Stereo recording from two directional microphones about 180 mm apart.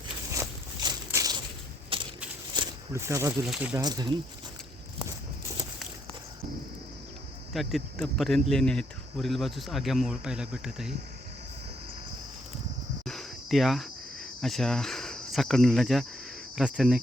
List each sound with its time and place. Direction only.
0.3 s a sound: 20° right (ahead or behind)
2.6 s a sound: 15° right (ahead or behind)
3.4 s speech: 5° right (ahead or behind)
3.8 s speech: 20° right (ahead or behind)
7.5 s speech: centre (ahead or behind)
13.1 s cricket: centre (ahead or behind)
14.4 s speech: centre (ahead or behind)